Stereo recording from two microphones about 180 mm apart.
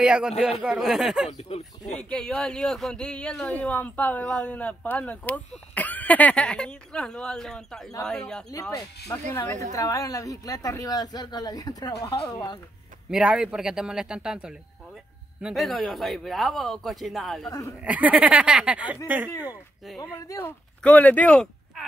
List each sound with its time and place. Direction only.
0.0 s speech: 5° right (ahead or behind)
8.7 s speech: 15° left (ahead or behind)
13.1 s speech: 5° right (ahead or behind)
17.5 s speech: 20° left (ahead or behind)
17.7 s speech: 5° right (ahead or behind)
20.0 s speech: 15° left (ahead or behind)